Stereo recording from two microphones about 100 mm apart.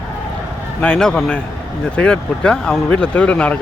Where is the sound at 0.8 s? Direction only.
10° left (ahead or behind).